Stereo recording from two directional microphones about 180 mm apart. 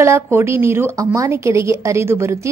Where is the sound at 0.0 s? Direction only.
15° right (ahead or behind).